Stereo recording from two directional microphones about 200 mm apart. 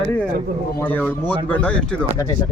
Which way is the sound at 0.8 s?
10° left (ahead or behind).